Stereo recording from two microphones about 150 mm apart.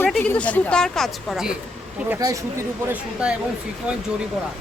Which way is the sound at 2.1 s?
20° right (ahead or behind).